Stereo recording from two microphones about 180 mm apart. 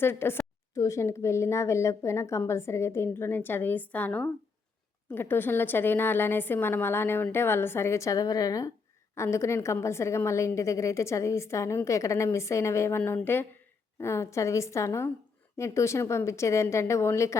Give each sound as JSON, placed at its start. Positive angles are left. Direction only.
{"t": 0.0, "sound": "a woman's voice", "side_deg": 15}